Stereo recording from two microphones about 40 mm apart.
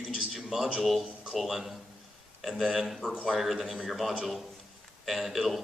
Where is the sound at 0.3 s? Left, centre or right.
Centre.